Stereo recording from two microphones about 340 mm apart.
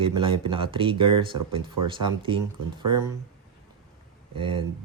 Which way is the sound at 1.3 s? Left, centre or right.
Right.